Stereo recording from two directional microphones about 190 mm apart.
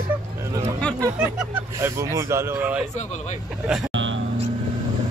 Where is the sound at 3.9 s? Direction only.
80° right.